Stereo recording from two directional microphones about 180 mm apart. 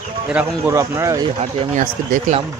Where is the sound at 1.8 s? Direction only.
45° right (ahead or behind).